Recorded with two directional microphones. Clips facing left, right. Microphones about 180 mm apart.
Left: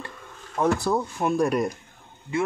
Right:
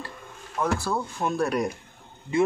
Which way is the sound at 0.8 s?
15° left (ahead or behind).